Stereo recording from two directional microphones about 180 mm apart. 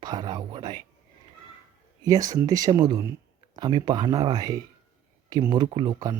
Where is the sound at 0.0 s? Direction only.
25° right (ahead or behind).